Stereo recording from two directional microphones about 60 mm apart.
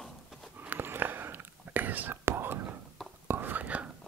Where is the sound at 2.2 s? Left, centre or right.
Right.